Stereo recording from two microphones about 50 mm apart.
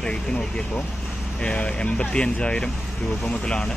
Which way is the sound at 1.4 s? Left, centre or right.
Left.